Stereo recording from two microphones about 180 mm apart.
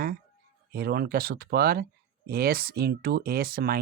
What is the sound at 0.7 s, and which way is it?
Speech, 55° right (ahead or behind).